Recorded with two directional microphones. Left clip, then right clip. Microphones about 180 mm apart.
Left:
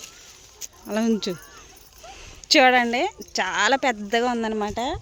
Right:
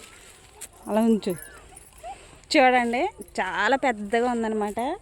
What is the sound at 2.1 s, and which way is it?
A woman's voice, 5° left (ahead or behind).